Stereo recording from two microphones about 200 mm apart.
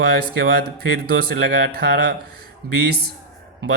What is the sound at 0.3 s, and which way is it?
Speech, 55° right (ahead or behind).